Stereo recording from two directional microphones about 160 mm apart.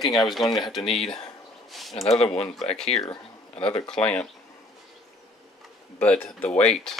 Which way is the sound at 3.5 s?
35° left (ahead or behind).